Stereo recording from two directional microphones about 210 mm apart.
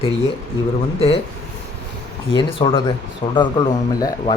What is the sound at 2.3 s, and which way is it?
Speech, 25° left (ahead or behind).